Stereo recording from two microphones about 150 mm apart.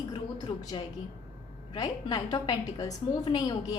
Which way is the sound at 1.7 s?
30° left (ahead or behind).